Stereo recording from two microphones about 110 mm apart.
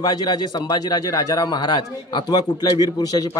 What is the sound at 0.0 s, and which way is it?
A man's voice, 40° left (ahead or behind).